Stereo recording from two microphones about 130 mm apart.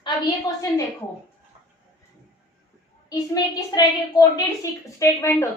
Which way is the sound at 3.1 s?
30° left (ahead or behind).